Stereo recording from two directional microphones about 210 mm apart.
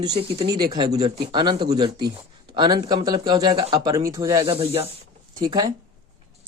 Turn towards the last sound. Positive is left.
turn(degrees=-20)  # may be behind; listen again after turning